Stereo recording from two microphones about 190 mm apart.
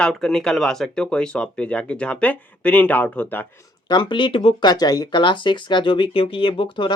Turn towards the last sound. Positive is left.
turn(degrees=25)  # may be behind; listen again after turning